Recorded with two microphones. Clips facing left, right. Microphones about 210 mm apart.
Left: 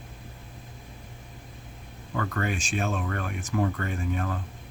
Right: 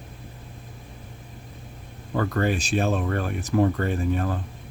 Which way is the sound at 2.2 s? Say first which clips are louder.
Right 6 dB; 35° right (ahead or behind).